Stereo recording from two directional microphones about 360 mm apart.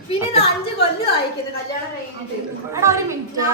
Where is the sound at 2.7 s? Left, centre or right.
Centre.